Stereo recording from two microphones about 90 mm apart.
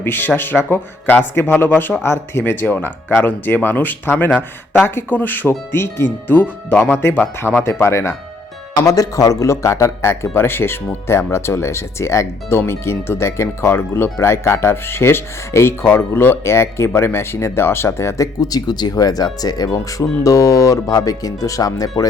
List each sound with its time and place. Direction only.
0.0 s speech: 20° left (ahead or behind)
7.7 s speech: 35° left (ahead or behind)
18.3 s speech: 45° left (ahead or behind)